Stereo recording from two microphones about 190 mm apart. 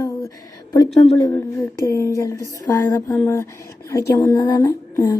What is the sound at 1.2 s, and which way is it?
Speech, 15° left (ahead or behind).